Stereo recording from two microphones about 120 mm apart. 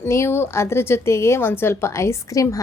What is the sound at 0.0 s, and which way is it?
A woman's voice, 20° left (ahead or behind).